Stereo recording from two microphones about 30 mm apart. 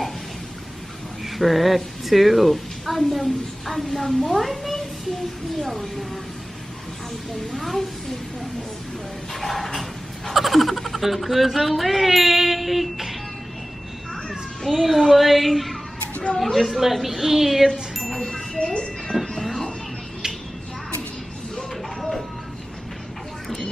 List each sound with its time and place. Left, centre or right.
1.2 s a woman's voice: centre
5.6 s child singing: centre
7.5 s child singing: centre
9.3 s child singing: centre
10.3 s a sound: centre
11.1 s child singing: centre
14.7 s child singing: centre
18.2 s wind chime: left
18.6 s music: left
19.1 s music: centre